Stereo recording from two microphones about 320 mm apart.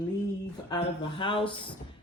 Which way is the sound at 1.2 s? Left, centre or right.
Centre.